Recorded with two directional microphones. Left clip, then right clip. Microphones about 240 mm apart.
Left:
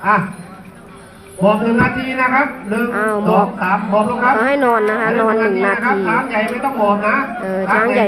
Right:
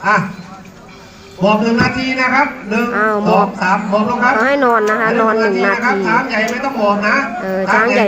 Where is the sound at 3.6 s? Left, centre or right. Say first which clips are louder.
Right 1 dB; right.